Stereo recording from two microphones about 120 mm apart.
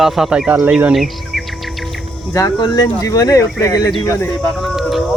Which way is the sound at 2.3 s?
30° left (ahead or behind).